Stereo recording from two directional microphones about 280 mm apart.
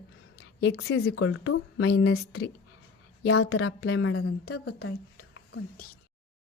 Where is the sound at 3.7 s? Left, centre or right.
Left.